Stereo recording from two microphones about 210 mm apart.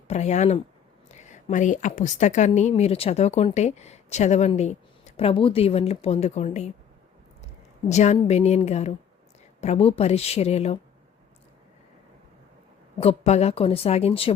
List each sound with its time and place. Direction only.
0.1 s a woman's voice: 35° left (ahead or behind)
7.9 s a woman's voice: 35° left (ahead or behind)
13.0 s a woman's voice: 30° left (ahead or behind)